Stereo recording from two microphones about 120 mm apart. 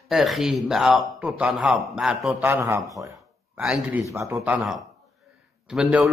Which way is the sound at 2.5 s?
25° right (ahead or behind).